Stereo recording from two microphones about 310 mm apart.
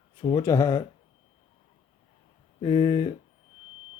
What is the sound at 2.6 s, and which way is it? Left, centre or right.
Speech, centre.